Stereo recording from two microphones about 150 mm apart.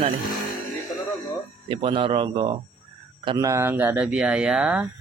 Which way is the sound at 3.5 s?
15° right (ahead or behind).